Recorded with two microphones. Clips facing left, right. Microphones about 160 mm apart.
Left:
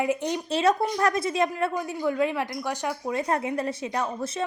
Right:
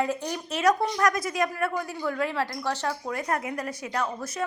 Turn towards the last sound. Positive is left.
turn(degrees=25)  # may be behind; listen again after turning